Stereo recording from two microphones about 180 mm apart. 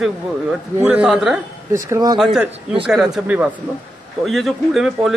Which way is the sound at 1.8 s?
20° right (ahead or behind).